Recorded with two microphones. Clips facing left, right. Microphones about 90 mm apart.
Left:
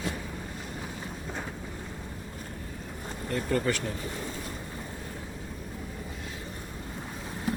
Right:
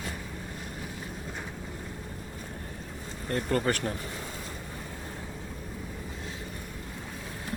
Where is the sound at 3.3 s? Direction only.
50° right (ahead or behind).